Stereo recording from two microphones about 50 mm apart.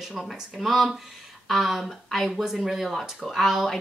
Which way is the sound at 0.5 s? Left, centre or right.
Centre.